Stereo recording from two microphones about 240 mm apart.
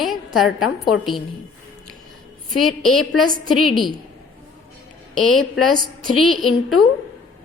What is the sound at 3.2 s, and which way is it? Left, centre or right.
Speech, right.